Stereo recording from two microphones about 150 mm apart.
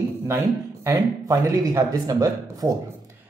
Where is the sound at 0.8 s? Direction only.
20° right (ahead or behind).